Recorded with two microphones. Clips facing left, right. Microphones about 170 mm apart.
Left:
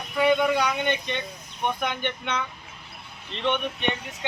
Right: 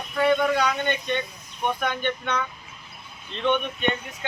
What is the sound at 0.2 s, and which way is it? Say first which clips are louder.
Speech: even; 15° left (ahead or behind).